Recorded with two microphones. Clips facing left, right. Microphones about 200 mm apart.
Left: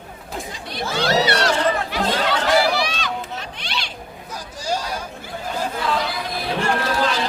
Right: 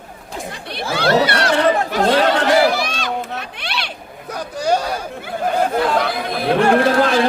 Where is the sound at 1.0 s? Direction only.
55° right (ahead or behind).